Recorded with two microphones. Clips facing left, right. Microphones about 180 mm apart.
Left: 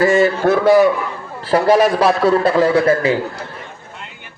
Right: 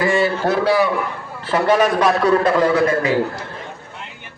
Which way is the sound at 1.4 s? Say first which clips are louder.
Left 3 dB; 35° left (ahead or behind).